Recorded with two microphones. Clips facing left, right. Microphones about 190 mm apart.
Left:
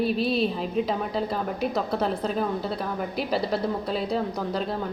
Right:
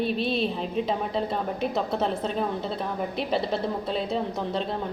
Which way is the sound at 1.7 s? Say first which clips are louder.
Even; 25° right (ahead or behind).